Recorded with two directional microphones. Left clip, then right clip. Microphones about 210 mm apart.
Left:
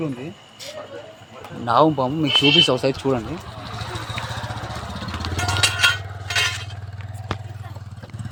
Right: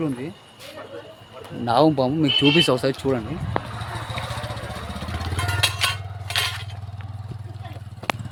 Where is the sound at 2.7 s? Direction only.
5° right (ahead or behind).